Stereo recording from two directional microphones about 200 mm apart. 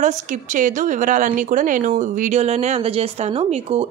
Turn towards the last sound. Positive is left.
turn(degrees=-30)  # may be behind; listen again after turning